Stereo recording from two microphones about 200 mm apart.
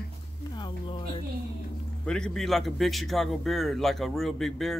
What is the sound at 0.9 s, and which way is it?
Speech, 25° left (ahead or behind).